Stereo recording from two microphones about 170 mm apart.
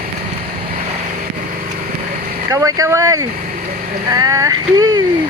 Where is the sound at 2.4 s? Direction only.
20° right (ahead or behind).